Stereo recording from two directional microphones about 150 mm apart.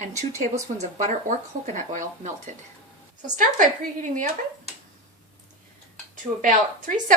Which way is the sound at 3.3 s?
55° right (ahead or behind).